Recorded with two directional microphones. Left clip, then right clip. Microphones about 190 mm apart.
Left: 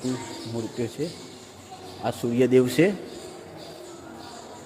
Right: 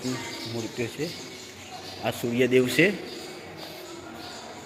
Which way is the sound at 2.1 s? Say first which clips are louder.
Left 2 dB; 30° left (ahead or behind).